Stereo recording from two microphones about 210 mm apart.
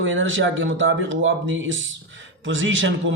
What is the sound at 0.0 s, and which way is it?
A man's voice, 65° right (ahead or behind).